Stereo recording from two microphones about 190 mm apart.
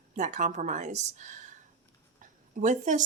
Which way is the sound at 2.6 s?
40° right (ahead or behind).